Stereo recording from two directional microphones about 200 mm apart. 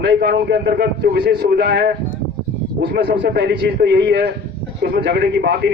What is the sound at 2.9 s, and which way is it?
A man's voice, 50° right (ahead or behind).